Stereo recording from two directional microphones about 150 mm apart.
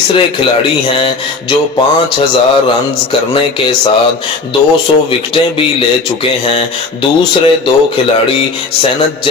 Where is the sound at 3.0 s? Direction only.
35° left (ahead or behind).